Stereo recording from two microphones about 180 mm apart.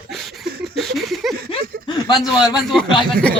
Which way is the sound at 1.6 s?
55° right (ahead or behind).